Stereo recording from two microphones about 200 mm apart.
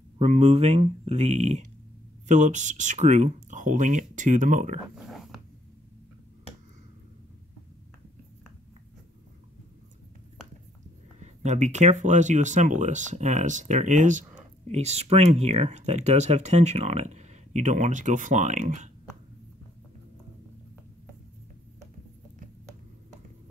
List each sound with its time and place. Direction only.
0.2 s speech: 35° right (ahead or behind)
4.9 s dog: centre (ahead or behind)
11.1 s speech: 35° right (ahead or behind)